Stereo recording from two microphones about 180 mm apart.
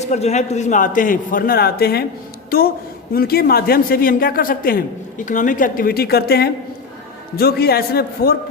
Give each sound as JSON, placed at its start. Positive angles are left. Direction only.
{"t": 0.0, "sound": "a man's voice", "side_deg": 40}